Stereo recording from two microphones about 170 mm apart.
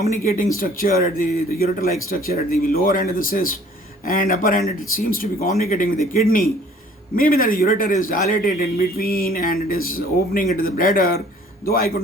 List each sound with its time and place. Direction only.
0.0 s a man's voice: 55° left (ahead or behind)
7.2 s a man's voice: 60° left (ahead or behind)